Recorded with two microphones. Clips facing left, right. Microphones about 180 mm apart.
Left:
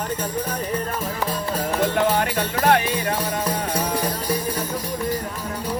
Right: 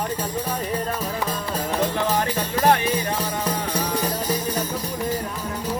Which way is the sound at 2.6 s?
35° right (ahead or behind).